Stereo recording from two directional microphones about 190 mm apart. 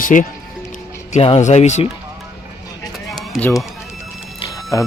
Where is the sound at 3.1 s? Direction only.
5° left (ahead or behind).